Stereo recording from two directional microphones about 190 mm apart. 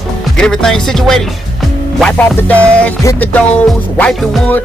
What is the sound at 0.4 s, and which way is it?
Music, 5° left (ahead or behind).